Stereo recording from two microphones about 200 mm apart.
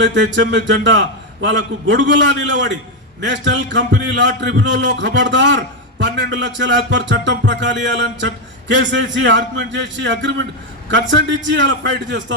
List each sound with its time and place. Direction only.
0.0 s a man's voice: 65° right (ahead or behind)